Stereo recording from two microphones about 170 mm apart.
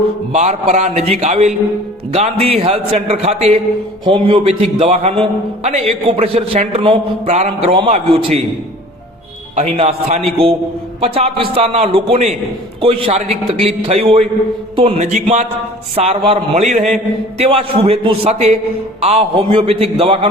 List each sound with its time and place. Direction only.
0.3 s a man's voice: 40° right (ahead or behind)
9.6 s a man's voice: 35° right (ahead or behind)
14.8 s music: 35° right (ahead or behind)
16.0 s a man's voice: 35° right (ahead or behind)